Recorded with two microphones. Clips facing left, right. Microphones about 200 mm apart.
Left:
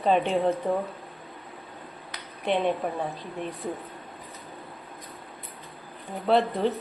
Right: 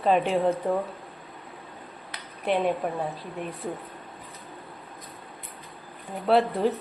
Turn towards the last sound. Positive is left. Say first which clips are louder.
# right 1 dB
turn(degrees=0)  # may be behind; listen again after turning